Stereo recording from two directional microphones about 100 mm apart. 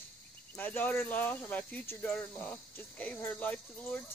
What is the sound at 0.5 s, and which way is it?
Speech, 20° left (ahead or behind).